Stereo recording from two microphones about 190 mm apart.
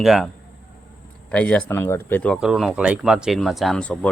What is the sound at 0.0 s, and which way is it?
Speech, centre (ahead or behind).